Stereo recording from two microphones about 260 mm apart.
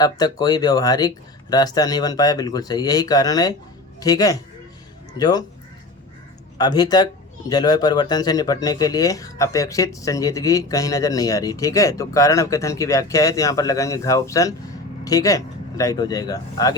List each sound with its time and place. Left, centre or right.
0.0 s a man's voice: centre
6.6 s a man's voice: centre